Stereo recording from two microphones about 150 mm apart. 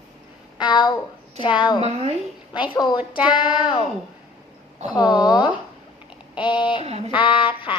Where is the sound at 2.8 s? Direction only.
30° left (ahead or behind).